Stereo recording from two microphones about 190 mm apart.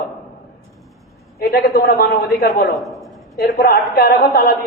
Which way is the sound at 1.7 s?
55° left (ahead or behind).